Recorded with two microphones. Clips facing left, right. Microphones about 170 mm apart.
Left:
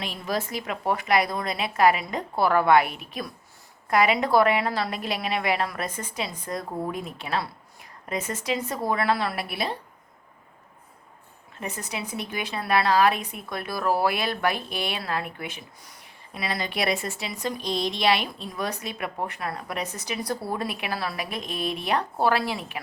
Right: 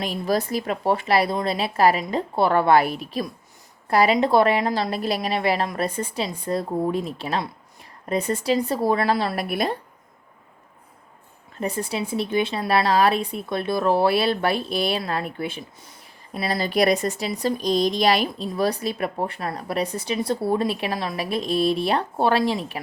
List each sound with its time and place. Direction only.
0.0 s speech: 40° right (ahead or behind)
11.6 s speech: 30° right (ahead or behind)